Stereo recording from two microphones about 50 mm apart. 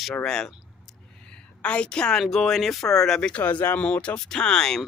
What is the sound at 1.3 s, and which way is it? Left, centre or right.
A woman's voice, left.